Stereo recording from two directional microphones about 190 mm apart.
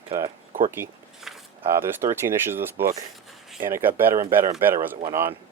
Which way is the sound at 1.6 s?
10° right (ahead or behind).